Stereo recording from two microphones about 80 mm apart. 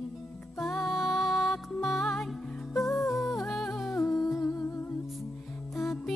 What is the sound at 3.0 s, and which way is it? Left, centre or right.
Humming, centre.